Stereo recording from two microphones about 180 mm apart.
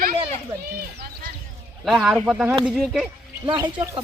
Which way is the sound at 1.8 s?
Centre (ahead or behind).